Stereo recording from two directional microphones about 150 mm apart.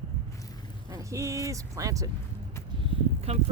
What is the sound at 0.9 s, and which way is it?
Speech, 20° right (ahead or behind).